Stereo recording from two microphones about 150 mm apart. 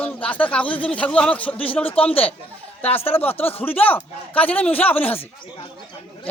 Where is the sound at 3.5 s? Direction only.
15° left (ahead or behind).